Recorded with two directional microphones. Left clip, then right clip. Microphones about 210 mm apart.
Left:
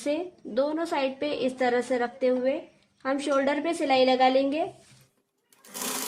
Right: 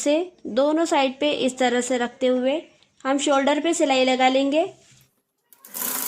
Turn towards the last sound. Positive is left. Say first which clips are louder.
# right 1 dB
turn(degrees=-5)  # may be behind; listen again after turning